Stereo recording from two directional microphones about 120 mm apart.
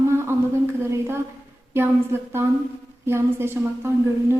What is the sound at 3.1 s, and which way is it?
Speech, 20° right (ahead or behind).